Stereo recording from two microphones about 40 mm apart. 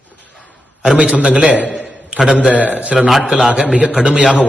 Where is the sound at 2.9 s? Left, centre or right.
Centre.